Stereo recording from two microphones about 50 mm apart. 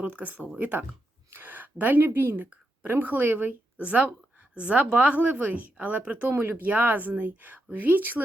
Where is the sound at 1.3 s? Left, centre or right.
Right.